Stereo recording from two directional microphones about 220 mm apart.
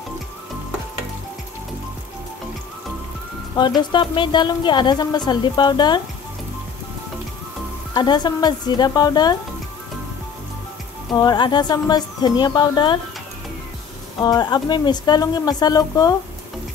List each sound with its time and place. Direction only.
3.5 s a woman's voice: 20° left (ahead or behind)
7.9 s a woman's voice: 20° left (ahead or behind)
11.1 s a woman's voice: 20° left (ahead or behind)
14.2 s speech: 20° left (ahead or behind)